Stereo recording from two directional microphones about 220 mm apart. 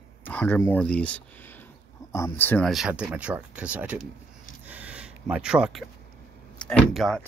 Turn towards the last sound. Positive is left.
turn(degrees=0)  # may be behind; listen again after turning